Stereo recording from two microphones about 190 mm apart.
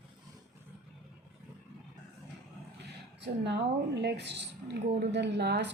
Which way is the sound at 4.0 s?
60° right (ahead or behind).